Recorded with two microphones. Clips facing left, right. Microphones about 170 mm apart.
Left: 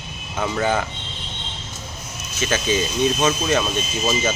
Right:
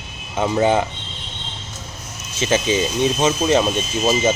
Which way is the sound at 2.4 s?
20° right (ahead or behind).